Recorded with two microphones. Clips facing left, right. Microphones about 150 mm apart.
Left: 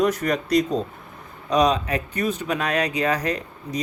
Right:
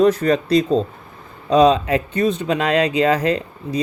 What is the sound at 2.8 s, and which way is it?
Speech, 30° right (ahead or behind).